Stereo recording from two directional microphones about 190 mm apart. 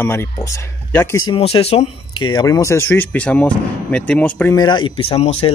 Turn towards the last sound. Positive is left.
turn(degrees=30)  # may be behind; listen again after turning